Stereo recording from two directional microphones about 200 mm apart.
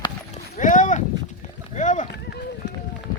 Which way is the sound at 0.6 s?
40° left (ahead or behind).